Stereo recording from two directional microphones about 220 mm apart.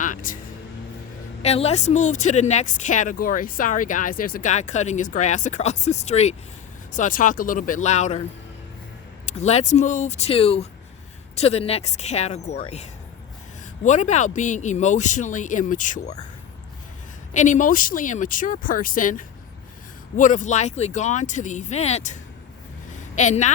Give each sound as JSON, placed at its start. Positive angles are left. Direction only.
{"t": 0.0, "sound": "speech", "side_deg": 35}
{"t": 1.4, "sound": "a woman's voice", "side_deg": 30}
{"t": 9.2, "sound": "a woman's voice", "side_deg": 30}
{"t": 17.3, "sound": "a woman's voice", "side_deg": 35}
{"t": 22.9, "sound": "a sound", "side_deg": 35}